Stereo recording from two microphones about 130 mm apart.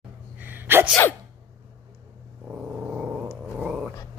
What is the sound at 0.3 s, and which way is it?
Gasp, 15° right (ahead or behind).